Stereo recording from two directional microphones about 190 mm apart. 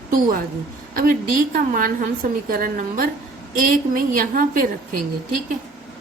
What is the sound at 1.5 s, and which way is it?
A woman's voice, 45° right (ahead or behind).